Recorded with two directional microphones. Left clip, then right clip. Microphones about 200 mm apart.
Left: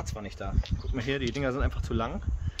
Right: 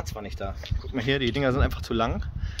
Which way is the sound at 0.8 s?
50° right (ahead or behind).